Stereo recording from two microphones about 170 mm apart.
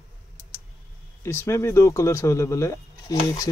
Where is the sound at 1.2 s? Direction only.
15° left (ahead or behind).